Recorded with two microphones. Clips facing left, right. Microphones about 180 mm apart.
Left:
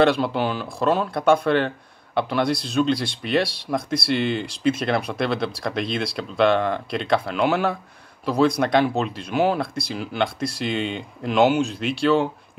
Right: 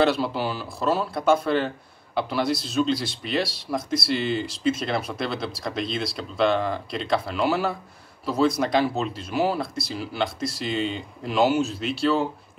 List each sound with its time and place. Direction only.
0.0 s speech: 5° right (ahead or behind)
4.1 s speech: 60° left (ahead or behind)
4.5 s speech: centre (ahead or behind)
10.9 s speech: 60° left (ahead or behind)
11.3 s speech: 5° right (ahead or behind)